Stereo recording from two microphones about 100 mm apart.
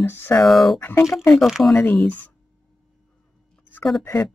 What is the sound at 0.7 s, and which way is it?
Speech, 20° left (ahead or behind).